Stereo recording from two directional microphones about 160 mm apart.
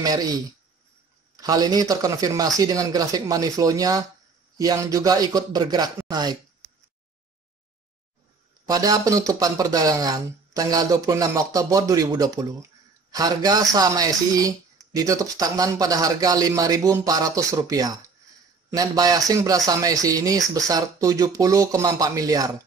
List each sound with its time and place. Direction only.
0.0 s speech: 25° right (ahead or behind)
8.6 s speech: 25° right (ahead or behind)